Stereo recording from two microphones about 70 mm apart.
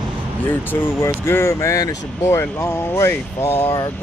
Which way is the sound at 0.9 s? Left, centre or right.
Left.